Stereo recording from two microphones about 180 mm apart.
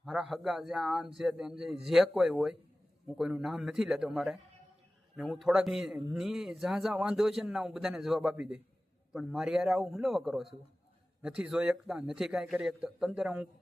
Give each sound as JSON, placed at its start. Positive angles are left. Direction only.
{"t": 0.0, "sound": "a man's voice", "side_deg": 0}